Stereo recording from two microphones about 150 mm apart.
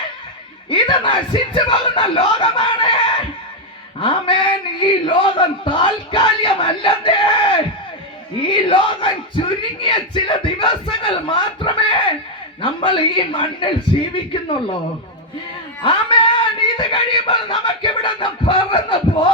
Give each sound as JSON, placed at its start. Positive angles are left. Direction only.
{"t": 0.7, "sound": "speech", "side_deg": 35}
{"t": 4.0, "sound": "a sound", "side_deg": 35}
{"t": 8.4, "sound": "speech", "side_deg": 35}
{"t": 15.8, "sound": "speech", "side_deg": 35}